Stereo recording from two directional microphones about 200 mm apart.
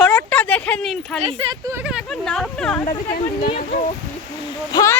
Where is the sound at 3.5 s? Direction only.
40° left (ahead or behind).